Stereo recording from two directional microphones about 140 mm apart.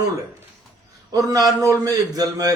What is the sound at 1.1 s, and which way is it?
A man's voice, 25° right (ahead or behind).